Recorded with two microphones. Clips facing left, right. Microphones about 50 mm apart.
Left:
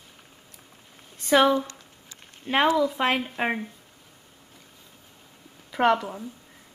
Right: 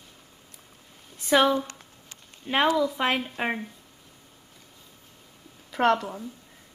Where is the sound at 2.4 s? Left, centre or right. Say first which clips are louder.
Left 2 dB; left.